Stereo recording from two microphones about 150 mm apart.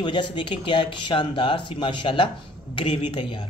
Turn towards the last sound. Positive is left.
turn(degrees=35)  # may be behind; listen again after turning